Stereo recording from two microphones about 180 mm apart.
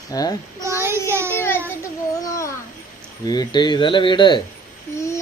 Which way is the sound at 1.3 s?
15° left (ahead or behind).